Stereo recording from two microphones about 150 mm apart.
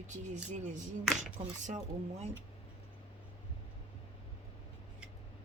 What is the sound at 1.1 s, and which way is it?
Speech, 5° right (ahead or behind).